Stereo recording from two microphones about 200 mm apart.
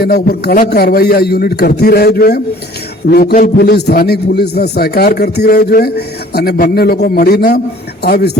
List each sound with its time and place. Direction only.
0.0 s a man's voice: 50° left (ahead or behind)